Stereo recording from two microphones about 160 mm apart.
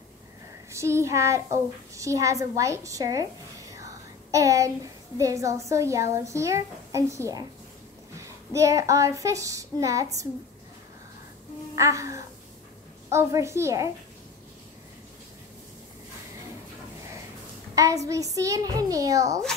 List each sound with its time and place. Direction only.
0.7 s a child's voice: 15° right (ahead or behind)
8.5 s a child's voice: 20° right (ahead or behind)
11.7 s a child's voice: 20° right (ahead or behind)
17.7 s a child's voice: 20° right (ahead or behind)